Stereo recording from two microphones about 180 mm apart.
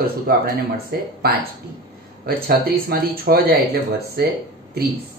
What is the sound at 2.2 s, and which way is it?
Speech, 55° right (ahead or behind).